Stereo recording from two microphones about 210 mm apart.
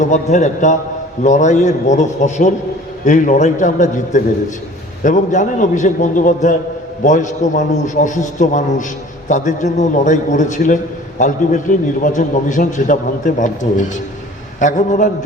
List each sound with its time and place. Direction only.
0.0 s a man's voice: 35° left (ahead or behind)